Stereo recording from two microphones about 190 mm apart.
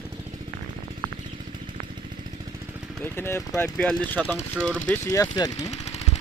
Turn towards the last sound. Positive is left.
turn(degrees=20)  # may be behind; listen again after turning